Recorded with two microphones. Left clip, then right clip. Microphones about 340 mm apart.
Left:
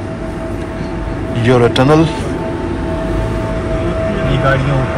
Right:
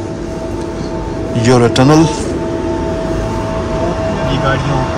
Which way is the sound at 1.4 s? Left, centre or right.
Centre.